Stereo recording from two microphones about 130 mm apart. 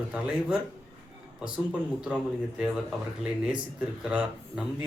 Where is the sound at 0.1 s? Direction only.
10° right (ahead or behind).